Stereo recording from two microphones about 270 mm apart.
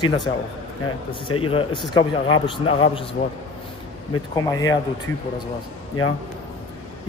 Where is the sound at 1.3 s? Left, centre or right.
Centre.